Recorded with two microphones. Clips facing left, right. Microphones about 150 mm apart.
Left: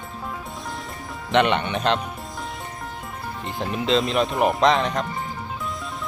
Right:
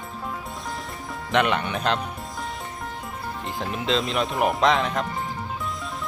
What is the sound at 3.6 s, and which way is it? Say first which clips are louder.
Speech: left 4 dB; centre (ahead or behind).